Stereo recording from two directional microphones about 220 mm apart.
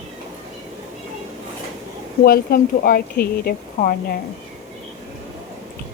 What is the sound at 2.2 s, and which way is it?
Speech, 40° left (ahead or behind).